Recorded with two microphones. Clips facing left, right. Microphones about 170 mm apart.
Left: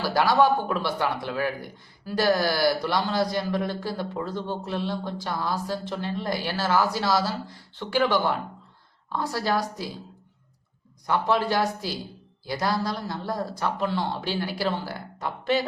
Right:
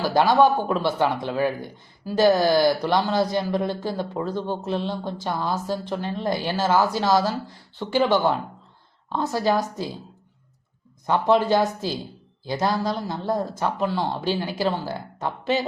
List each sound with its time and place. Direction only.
0.0 s a woman's voice: 15° right (ahead or behind)
11.0 s speech: 20° right (ahead or behind)